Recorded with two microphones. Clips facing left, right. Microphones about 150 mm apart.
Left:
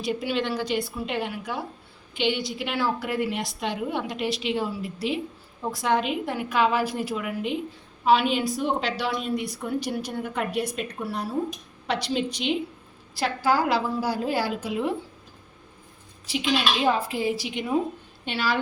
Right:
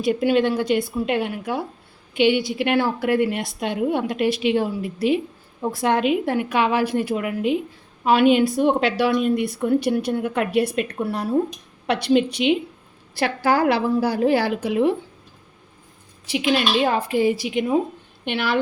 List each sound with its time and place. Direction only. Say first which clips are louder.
0.0 s a woman's voice: right 8 dB; 55° right (ahead or behind)
6.2 s a woman's voice: right 3 dB; 70° right (ahead or behind)
16.2 s a woman's voice: right 4 dB; 65° right (ahead or behind)